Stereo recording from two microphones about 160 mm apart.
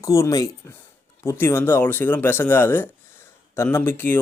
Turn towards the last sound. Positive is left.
turn(degrees=15)  # may be behind; listen again after turning